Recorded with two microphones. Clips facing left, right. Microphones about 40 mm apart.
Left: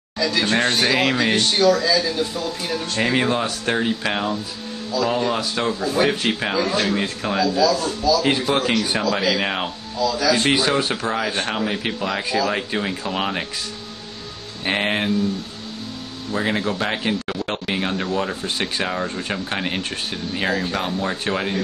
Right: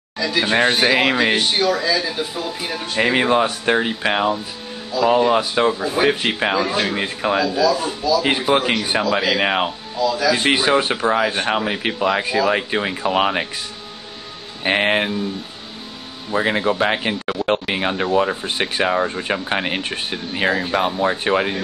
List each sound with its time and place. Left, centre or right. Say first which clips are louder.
0.2 s speech: right 2 dB; centre
10.5 s speech: right 3 dB; right
14.6 s speech: right 4 dB; centre
16.3 s speech: right 4 dB; centre